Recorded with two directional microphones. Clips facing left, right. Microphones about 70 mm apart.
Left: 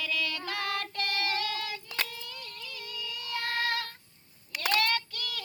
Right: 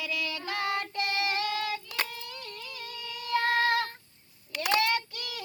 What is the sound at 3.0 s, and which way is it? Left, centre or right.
Child singing, right.